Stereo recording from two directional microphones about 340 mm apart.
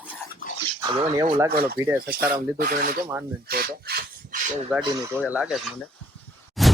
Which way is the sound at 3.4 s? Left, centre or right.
Right.